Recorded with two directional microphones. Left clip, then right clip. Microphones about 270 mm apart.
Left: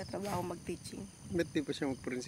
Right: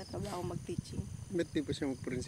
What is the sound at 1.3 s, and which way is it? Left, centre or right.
Speech, centre.